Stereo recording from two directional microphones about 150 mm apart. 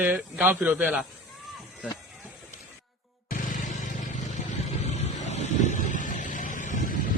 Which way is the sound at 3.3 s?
60° left (ahead or behind).